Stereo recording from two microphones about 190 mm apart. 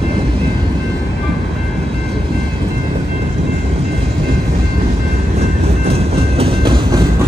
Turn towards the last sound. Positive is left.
turn(degrees=-30)  # may be behind; listen again after turning